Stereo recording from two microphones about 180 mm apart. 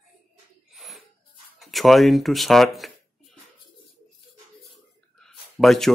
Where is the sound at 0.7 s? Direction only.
Centre (ahead or behind).